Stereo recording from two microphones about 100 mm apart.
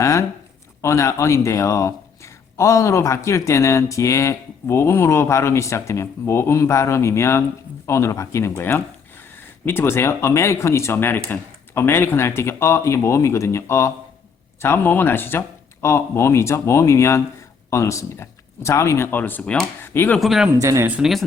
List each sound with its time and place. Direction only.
0.0 s speech: 30° left (ahead or behind); by 19.6 s 10° left (ahead or behind)
19.8 s speech: 20° left (ahead or behind)
20.1 s a man's voice: centre (ahead or behind)
20.6 s speech: 30° right (ahead or behind)
21.0 s a man's voice: centre (ahead or behind)